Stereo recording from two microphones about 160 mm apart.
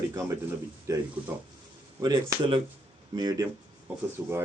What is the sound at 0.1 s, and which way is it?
A man's voice, 20° right (ahead or behind).